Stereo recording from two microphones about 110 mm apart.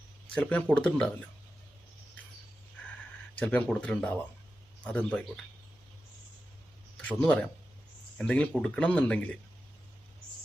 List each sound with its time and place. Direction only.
0.3 s speech: 10° left (ahead or behind)
3.3 s speech: 15° left (ahead or behind)
6.9 s speech: 10° left (ahead or behind)